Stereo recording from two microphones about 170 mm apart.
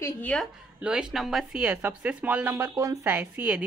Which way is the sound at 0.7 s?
5° right (ahead or behind).